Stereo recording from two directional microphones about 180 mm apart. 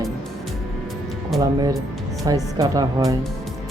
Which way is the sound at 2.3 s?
20° right (ahead or behind).